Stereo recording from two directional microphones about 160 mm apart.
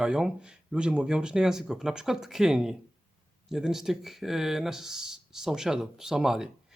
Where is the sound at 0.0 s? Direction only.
5° right (ahead or behind).